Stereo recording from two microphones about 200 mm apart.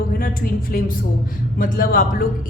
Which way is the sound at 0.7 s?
45° left (ahead or behind).